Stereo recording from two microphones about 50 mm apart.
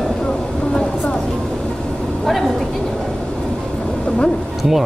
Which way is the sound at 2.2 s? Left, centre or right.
Centre.